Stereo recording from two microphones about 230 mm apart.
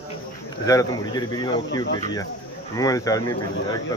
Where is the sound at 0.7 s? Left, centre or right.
Centre.